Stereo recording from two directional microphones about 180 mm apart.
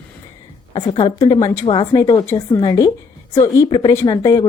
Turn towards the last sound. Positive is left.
turn(degrees=20)  # may be behind; listen again after turning